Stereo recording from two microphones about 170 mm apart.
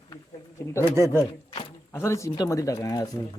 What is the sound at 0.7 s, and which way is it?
Speech, 20° left (ahead or behind).